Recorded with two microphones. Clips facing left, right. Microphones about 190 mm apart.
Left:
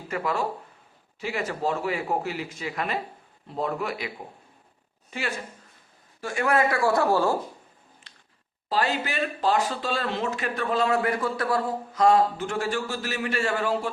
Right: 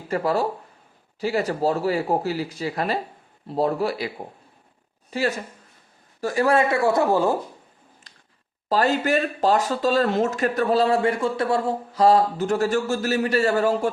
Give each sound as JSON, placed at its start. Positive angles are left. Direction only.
{"t": 0.1, "sound": "speech", "side_deg": -35}
{"t": 5.1, "sound": "speech", "side_deg": -35}
{"t": 8.7, "sound": "speech", "side_deg": -45}